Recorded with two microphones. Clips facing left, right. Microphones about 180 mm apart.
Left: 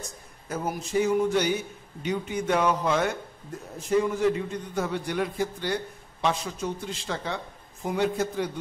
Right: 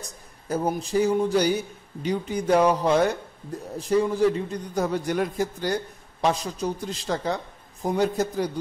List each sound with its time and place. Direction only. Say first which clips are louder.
0.0 s a man's voice: even; 35° right (ahead or behind)